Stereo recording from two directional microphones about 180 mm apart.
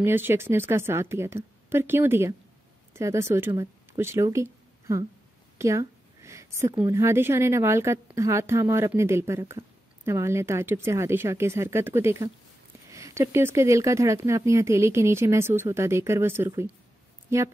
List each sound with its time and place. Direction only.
0.0 s speech: 10° right (ahead or behind)
5.6 s a sound: 15° right (ahead or behind)
6.8 s speech: 15° right (ahead or behind)